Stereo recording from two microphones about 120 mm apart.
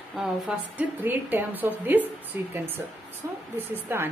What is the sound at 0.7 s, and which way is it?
A woman's voice, 15° right (ahead or behind).